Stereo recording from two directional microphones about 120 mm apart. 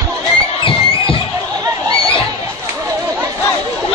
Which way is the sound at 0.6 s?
45° left (ahead or behind).